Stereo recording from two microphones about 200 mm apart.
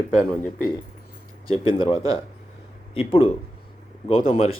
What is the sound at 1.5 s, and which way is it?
Speech, 25° left (ahead or behind).